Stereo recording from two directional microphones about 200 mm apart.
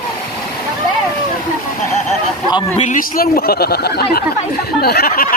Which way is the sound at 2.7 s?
35° left (ahead or behind).